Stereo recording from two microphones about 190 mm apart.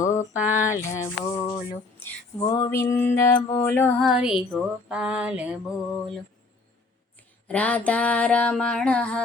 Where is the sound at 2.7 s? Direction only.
15° left (ahead or behind).